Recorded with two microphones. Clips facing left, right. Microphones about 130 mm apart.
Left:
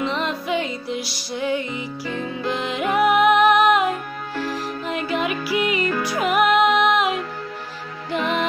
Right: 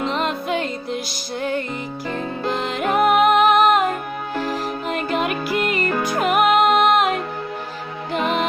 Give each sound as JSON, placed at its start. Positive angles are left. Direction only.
{"t": 0.0, "sound": "music", "side_deg": -45}